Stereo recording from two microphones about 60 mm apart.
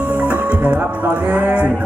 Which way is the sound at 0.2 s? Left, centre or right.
Right.